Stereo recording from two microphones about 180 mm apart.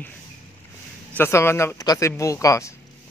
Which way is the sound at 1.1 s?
15° left (ahead or behind).